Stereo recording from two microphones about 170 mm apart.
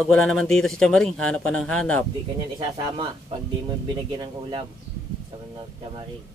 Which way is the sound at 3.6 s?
25° right (ahead or behind).